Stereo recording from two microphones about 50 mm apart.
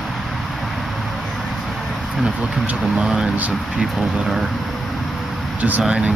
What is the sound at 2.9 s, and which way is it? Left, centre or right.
Speech, centre.